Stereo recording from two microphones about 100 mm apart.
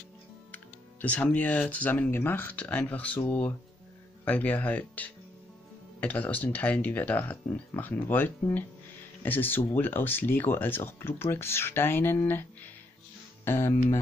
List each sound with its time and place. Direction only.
1.0 s speech: 15° left (ahead or behind)
13.5 s speech: 25° left (ahead or behind)